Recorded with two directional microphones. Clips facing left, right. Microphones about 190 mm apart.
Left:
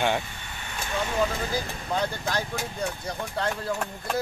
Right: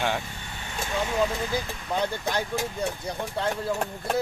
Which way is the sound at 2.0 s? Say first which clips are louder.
Right 2 dB; 15° right (ahead or behind).